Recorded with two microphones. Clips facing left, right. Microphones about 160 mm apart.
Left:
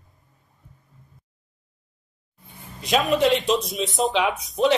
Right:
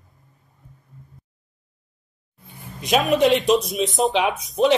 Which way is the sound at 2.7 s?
20° right (ahead or behind).